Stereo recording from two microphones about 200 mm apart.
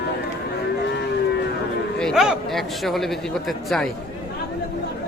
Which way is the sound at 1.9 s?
Centre (ahead or behind).